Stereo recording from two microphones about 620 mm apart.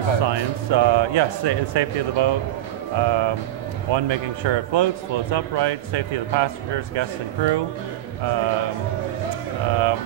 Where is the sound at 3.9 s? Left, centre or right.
Right.